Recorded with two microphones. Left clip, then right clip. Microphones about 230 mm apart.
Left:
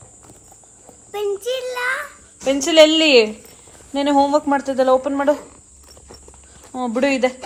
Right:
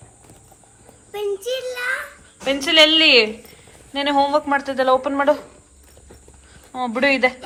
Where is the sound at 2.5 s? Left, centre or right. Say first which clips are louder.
Left 2 dB; centre.